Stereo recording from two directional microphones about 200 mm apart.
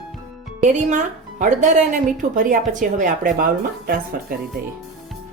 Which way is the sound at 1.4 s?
40° right (ahead or behind).